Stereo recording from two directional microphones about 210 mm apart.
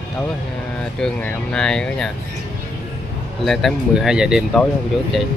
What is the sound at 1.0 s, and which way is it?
Speech, 5° left (ahead or behind).